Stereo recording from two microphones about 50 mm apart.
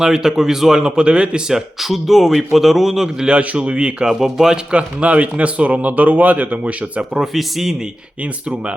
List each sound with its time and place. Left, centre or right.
0.0 s speech: centre
3.2 s speech: right
4.0 s speech: centre
4.7 s speech: right
7.1 s speech: centre